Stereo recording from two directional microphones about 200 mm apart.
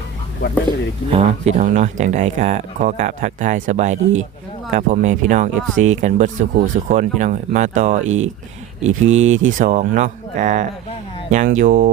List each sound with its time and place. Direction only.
1.1 s speech: 35° right (ahead or behind)